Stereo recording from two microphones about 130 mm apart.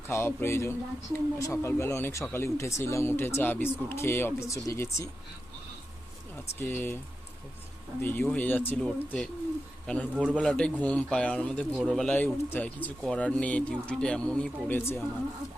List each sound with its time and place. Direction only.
0.1 s speech: 20° left (ahead or behind)
6.6 s speech: 15° left (ahead or behind)
8.0 s a man's voice: 15° left (ahead or behind)
12.1 s speech: 15° left (ahead or behind)